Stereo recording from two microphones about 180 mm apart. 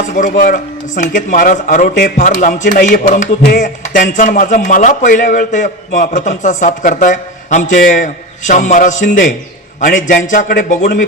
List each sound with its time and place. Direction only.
0.1 s speech: 45° left (ahead or behind)